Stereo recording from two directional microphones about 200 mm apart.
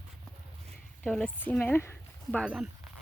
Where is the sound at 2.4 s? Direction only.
5° right (ahead or behind).